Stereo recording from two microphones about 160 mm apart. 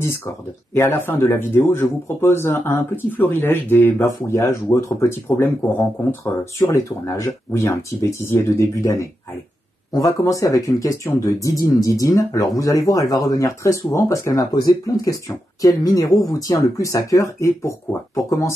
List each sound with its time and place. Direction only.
0.7 s speech: 15° left (ahead or behind)